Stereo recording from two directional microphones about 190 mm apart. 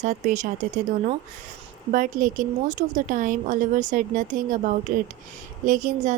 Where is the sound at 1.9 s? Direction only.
45° right (ahead or behind).